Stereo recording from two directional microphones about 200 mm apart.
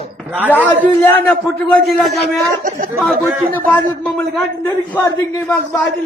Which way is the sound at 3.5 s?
10° left (ahead or behind).